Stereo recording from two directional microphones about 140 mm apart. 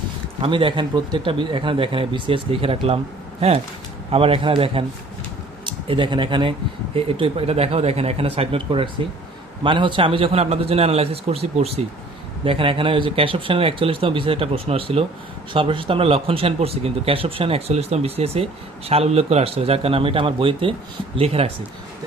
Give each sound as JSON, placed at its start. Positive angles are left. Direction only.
{"t": 0.4, "sound": "speech", "side_deg": -35}
{"t": 4.1, "sound": "speech", "side_deg": -40}
{"t": 5.9, "sound": "speech", "side_deg": -35}